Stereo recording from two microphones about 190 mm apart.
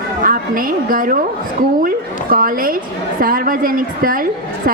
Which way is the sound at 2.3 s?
50° right (ahead or behind).